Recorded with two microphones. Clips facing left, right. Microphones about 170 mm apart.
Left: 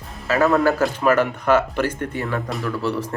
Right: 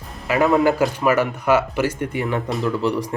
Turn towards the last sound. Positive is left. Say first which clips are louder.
# right 3 dB
turn(degrees=-15)  # may be behind; listen again after turning